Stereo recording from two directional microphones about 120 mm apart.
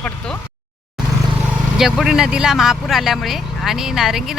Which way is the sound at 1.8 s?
5° right (ahead or behind).